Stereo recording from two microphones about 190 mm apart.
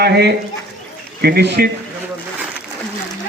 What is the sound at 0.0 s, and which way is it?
A man's voice, 60° right (ahead or behind).